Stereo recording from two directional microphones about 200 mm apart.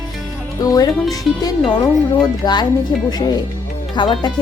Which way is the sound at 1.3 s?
Centre (ahead or behind).